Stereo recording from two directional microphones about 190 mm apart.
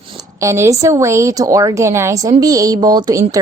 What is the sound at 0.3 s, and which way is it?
A woman's voice, 15° right (ahead or behind).